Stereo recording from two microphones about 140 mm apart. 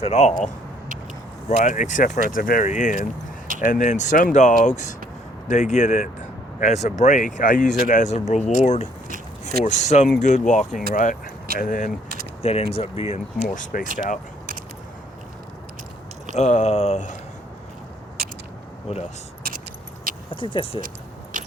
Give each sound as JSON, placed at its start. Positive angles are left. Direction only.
{"t": 0.0, "sound": "speech", "side_deg": 50}
{"t": 2.3, "sound": "speech", "side_deg": 85}
{"t": 2.6, "sound": "speech", "side_deg": 60}
{"t": 12.4, "sound": "speech", "side_deg": 45}
{"t": 13.5, "sound": "speech", "side_deg": 70}
{"t": 16.4, "sound": "speech", "side_deg": 55}
{"t": 18.9, "sound": "speech", "side_deg": 50}
{"t": 19.4, "sound": "keys jangling", "side_deg": -90}
{"t": 20.3, "sound": "speech", "side_deg": 40}
{"t": 21.3, "sound": "biting", "side_deg": -70}